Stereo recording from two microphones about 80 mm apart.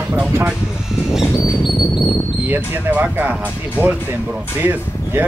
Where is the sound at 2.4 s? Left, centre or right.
Right.